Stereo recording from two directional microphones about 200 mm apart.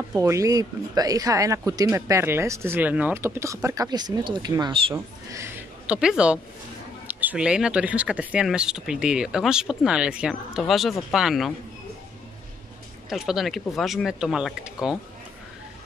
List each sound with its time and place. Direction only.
0.1 s speech: 15° right (ahead or behind)
4.9 s speech: 15° right (ahead or behind)
13.1 s speech: centre (ahead or behind)